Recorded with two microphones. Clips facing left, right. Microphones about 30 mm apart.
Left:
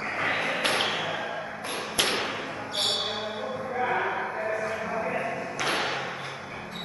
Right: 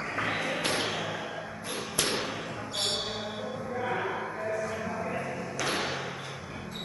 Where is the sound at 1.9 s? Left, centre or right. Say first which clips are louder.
Left 4 dB; left.